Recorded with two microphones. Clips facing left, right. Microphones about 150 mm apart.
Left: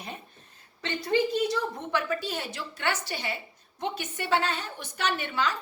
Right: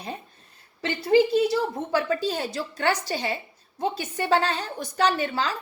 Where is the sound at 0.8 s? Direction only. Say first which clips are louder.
Right 6 dB; 30° right (ahead or behind).